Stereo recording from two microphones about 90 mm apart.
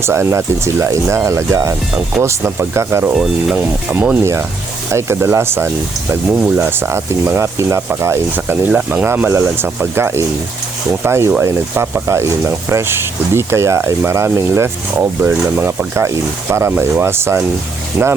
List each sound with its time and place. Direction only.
0.0 s speech: 30° right (ahead or behind)
3.5 s speech: 20° right (ahead or behind)
4.9 s speech: 30° right (ahead or behind)